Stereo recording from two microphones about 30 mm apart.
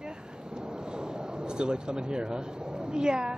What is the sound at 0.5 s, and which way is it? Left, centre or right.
Speech, right.